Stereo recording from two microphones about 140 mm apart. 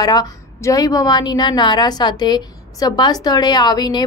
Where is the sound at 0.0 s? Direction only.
30° left (ahead or behind).